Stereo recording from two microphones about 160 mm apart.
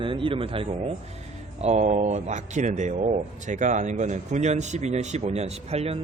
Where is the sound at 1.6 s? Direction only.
45° right (ahead or behind).